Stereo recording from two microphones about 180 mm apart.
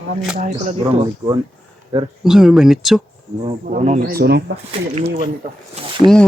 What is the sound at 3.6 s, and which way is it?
Speech, 40° right (ahead or behind).